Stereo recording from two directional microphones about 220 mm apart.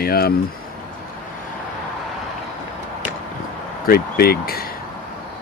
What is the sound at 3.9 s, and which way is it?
Speech, 45° left (ahead or behind).